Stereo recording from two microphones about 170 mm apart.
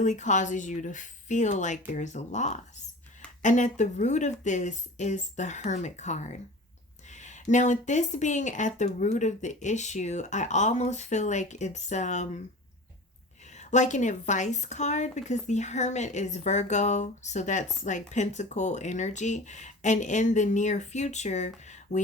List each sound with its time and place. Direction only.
0.0 s a woman's voice: 45° left (ahead or behind)
13.5 s a woman's voice: 45° left (ahead or behind)